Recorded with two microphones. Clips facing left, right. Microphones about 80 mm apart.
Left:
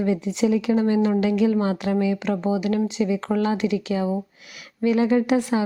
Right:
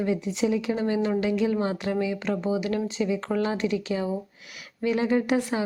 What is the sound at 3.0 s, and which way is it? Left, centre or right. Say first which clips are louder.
Speech: left 2 dB; centre.